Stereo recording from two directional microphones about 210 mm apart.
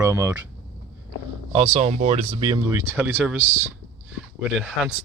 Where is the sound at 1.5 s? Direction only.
35° right (ahead or behind).